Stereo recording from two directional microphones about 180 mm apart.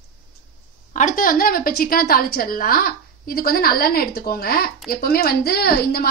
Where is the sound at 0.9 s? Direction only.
45° left (ahead or behind).